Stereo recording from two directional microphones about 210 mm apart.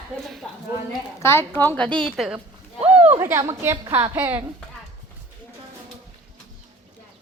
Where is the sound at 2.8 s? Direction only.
5° right (ahead or behind).